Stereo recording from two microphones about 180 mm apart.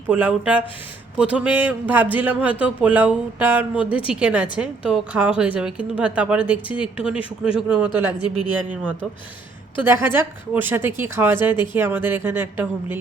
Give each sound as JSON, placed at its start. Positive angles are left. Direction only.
{"t": 0.1, "sound": "a man's voice", "side_deg": -10}
{"t": 8.2, "sound": "a woman's voice", "side_deg": 25}
{"t": 8.7, "sound": "a man's voice", "side_deg": -10}